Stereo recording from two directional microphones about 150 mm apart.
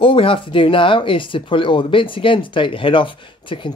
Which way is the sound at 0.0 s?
35° left (ahead or behind).